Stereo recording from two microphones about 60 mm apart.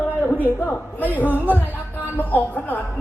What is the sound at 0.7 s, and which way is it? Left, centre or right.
Speech, left.